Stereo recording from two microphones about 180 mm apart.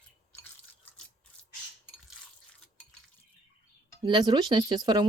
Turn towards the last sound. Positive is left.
turn(degrees=-25)  # may be behind; listen again after turning